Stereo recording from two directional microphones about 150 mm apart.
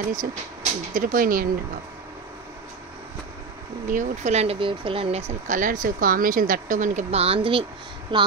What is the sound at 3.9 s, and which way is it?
Speech, 55° right (ahead or behind).